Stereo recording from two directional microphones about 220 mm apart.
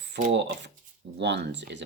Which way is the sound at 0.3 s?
55° right (ahead or behind).